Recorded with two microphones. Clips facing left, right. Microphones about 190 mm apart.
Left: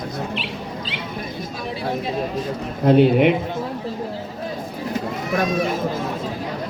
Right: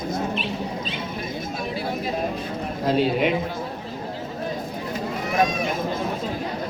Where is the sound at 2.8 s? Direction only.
60° left (ahead or behind).